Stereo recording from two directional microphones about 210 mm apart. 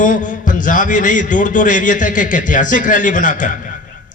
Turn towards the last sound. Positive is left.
turn(degrees=40)  # may be behind; listen again after turning